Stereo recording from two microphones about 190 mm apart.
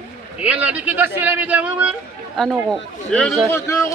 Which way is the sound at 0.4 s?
5° right (ahead or behind).